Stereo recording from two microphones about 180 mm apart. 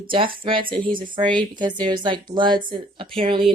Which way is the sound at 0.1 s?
30° right (ahead or behind).